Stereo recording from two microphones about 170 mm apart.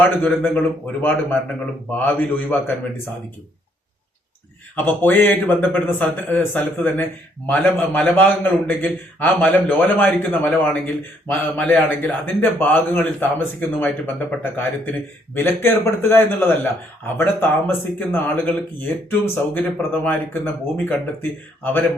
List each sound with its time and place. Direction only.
0.0 s a man's voice: 10° left (ahead or behind)
4.7 s a man's voice: 10° left (ahead or behind)